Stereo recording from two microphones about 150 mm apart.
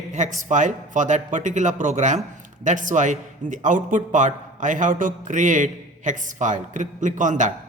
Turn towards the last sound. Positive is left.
turn(degrees=-55)  # may be behind; listen again after turning